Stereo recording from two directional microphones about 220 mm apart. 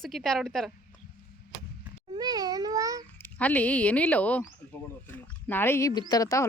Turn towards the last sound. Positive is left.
turn(degrees=15)  # may be behind; listen again after turning